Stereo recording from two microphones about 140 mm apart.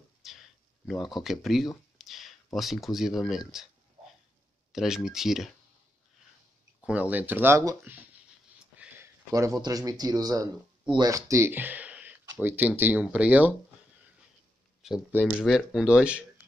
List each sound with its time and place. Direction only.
0.2 s a sound: centre (ahead or behind)
0.8 s speech: centre (ahead or behind)
4.7 s speech: 5° right (ahead or behind)
6.8 s speech: 10° right (ahead or behind)
8.7 s a sound: 15° right (ahead or behind)
9.6 s speech: 25° right (ahead or behind); by 13.6 s 10° right (ahead or behind)
14.8 s speech: 5° right (ahead or behind)